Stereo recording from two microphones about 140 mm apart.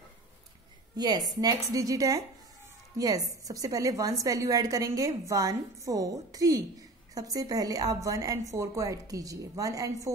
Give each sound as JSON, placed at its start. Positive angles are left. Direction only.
{"t": 0.9, "sound": "a woman's voice", "side_deg": -30}